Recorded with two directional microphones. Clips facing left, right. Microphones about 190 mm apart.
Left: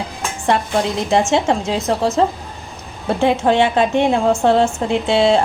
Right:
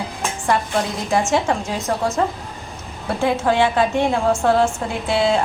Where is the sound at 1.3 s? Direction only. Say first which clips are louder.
Left 3 dB; 25° left (ahead or behind).